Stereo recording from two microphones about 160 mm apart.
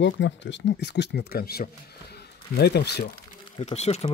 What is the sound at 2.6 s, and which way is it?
Speech, 90° left.